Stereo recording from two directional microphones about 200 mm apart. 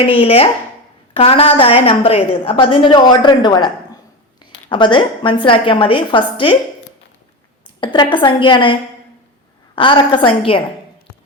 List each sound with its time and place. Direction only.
0.0 s a woman's voice: 30° left (ahead or behind)
4.7 s a woman's voice: 25° left (ahead or behind)
7.9 s a woman's voice: 25° left (ahead or behind)
9.7 s a woman's voice: 25° left (ahead or behind)